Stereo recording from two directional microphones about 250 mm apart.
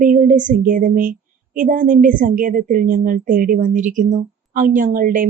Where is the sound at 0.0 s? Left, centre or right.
Right.